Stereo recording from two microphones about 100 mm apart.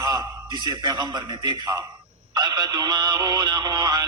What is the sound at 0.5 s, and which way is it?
Speech, 50° right (ahead or behind).